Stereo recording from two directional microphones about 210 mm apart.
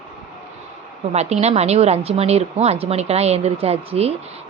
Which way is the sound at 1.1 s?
30° right (ahead or behind).